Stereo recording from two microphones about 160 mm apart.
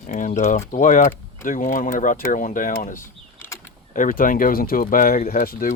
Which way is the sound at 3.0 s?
15° left (ahead or behind).